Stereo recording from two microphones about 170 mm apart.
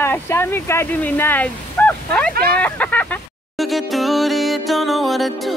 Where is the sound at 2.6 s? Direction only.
10° left (ahead or behind).